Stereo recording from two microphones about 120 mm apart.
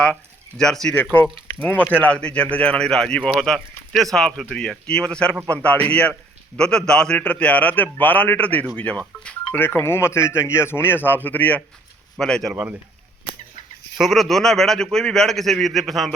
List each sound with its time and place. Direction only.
0.0 s a man's voice: 5° left (ahead or behind)
14.0 s a man's voice: centre (ahead or behind)